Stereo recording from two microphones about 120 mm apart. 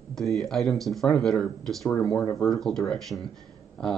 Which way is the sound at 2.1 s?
30° left (ahead or behind).